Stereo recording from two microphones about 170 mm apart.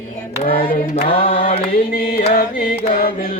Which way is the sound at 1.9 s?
60° left (ahead or behind).